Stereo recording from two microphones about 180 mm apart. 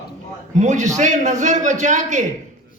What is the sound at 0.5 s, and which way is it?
A man's voice, 40° right (ahead or behind).